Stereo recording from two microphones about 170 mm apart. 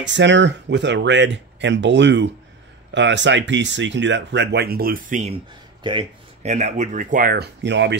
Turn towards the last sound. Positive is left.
turn(degrees=-90)